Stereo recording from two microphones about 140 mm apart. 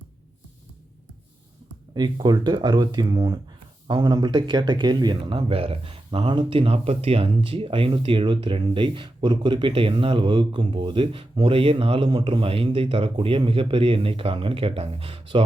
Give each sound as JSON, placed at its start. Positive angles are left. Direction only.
{"t": 2.0, "sound": "speech", "side_deg": -30}